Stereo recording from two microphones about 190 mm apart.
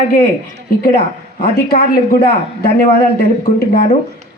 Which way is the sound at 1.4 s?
55° left (ahead or behind).